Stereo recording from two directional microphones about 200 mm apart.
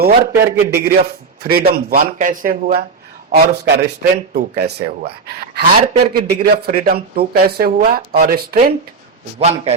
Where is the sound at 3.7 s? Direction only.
55° right (ahead or behind).